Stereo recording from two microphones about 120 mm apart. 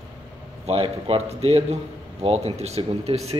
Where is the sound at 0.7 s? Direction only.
55° right (ahead or behind).